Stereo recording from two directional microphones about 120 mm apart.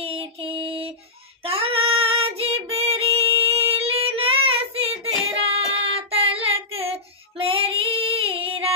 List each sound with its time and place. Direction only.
0.0 s music: 50° right (ahead or behind)
1.4 s female singing: 50° right (ahead or behind)
5.4 s child singing: 55° right (ahead or behind)